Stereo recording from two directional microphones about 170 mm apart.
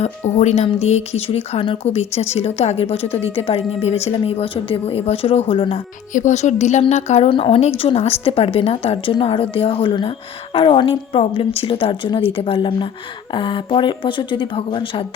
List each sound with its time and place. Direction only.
0.0 s speech: 40° left (ahead or behind)
6.1 s speech: 45° left (ahead or behind)